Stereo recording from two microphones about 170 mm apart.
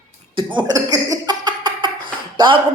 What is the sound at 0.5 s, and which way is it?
Speech, 20° right (ahead or behind).